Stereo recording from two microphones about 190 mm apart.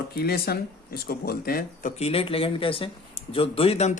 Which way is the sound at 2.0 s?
30° left (ahead or behind).